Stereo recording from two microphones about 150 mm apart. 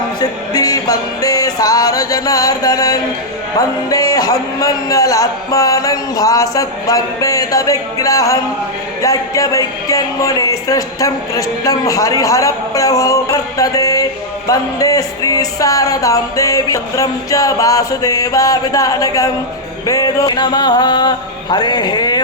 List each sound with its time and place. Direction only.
0.2 s music: 25° left (ahead or behind)
3.8 s speech: 25° left (ahead or behind)